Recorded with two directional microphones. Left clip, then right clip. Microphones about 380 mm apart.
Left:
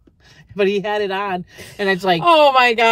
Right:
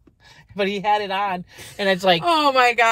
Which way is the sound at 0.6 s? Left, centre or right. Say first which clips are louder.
Left 2 dB; centre.